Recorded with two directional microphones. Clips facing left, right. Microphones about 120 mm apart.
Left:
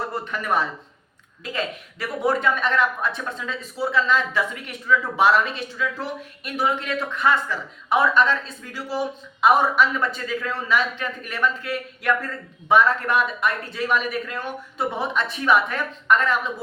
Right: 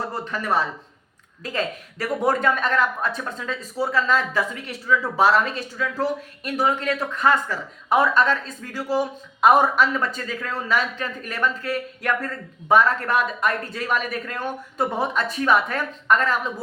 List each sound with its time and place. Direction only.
0.3 s speech: 35° right (ahead or behind)